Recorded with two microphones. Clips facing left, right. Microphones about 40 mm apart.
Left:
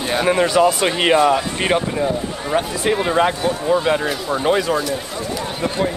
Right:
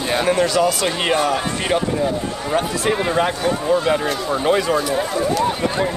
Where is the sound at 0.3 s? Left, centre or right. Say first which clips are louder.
Left 3 dB; left.